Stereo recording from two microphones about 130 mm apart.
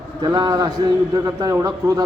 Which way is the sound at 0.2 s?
30° right (ahead or behind).